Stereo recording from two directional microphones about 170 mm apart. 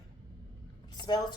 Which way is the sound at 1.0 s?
25° left (ahead or behind).